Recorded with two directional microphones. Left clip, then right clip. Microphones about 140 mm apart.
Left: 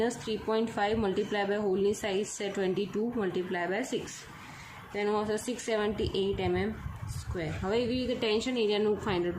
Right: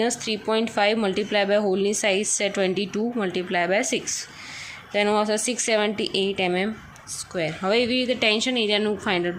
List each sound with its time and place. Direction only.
0.0 s a woman's voice: 25° right (ahead or behind)